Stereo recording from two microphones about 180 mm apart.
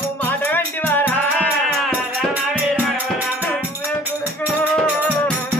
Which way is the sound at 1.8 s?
10° right (ahead or behind).